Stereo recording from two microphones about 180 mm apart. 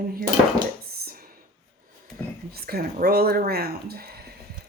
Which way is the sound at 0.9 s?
60° right (ahead or behind).